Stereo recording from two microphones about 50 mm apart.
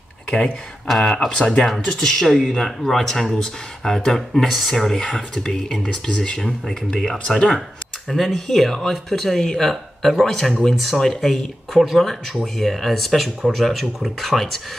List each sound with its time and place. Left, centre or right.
0.8 s speech: centre
1.1 s speech: centre